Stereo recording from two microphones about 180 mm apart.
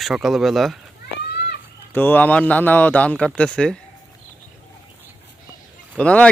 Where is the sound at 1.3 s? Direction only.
65° left (ahead or behind).